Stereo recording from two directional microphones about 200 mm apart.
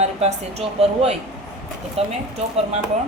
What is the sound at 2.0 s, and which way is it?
Speech, 30° right (ahead or behind).